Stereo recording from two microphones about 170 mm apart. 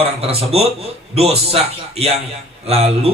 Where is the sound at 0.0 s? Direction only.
35° right (ahead or behind).